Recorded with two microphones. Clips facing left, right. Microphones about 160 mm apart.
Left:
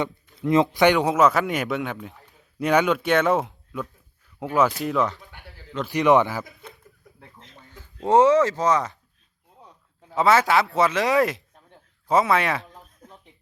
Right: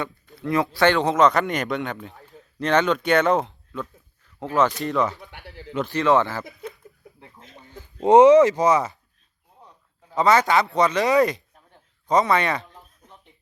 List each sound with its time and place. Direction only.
0.0 s speech: 20° left (ahead or behind); by 5.1 s centre (ahead or behind)
5.8 s speech: 15° left (ahead or behind)
7.5 s a sound: 15° right (ahead or behind)
8.0 s speech: 15° right (ahead or behind)
10.2 s speech: 5° left (ahead or behind)